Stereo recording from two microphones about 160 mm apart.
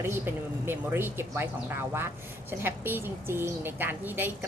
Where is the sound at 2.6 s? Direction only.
15° right (ahead or behind).